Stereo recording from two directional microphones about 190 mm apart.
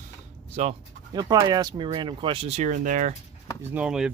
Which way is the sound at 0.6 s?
40° right (ahead or behind).